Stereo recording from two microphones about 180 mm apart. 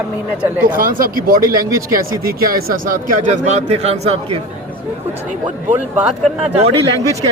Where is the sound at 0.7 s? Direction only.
50° right (ahead or behind).